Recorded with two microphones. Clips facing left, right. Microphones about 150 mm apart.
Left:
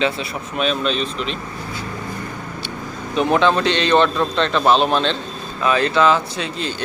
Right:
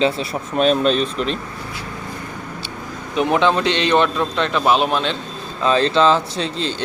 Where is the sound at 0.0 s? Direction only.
35° right (ahead or behind).